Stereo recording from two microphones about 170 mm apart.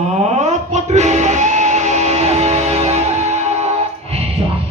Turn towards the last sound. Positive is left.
turn(degrees=-40)  # may be behind; listen again after turning